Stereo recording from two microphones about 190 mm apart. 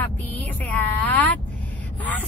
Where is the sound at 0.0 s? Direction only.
10° left (ahead or behind).